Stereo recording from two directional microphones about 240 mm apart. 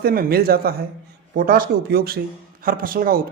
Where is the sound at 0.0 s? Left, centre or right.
Right.